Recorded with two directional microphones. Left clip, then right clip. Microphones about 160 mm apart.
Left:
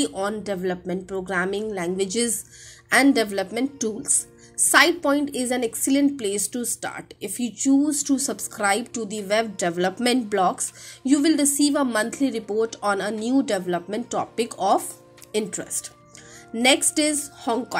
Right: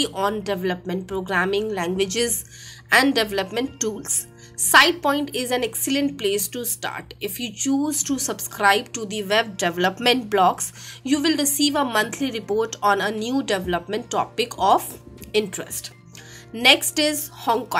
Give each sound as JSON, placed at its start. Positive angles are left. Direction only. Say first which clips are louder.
{"t": 0.0, "sound": "a woman's voice", "louder": "right 3 dB", "side_deg": 45}